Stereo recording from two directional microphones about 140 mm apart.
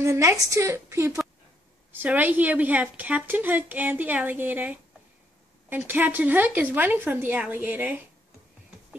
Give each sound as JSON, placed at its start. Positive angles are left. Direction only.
{"t": 0.0, "sound": "a woman's voice", "side_deg": -20}
{"t": 5.9, "sound": "a woman's voice", "side_deg": -15}